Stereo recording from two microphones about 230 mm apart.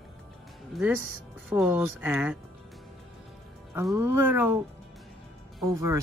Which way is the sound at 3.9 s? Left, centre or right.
Centre.